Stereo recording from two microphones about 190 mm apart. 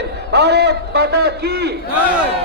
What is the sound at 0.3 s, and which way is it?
A man's voice, 60° right (ahead or behind).